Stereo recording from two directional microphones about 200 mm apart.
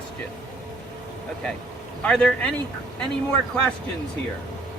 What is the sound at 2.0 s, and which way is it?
Speech, 5° left (ahead or behind).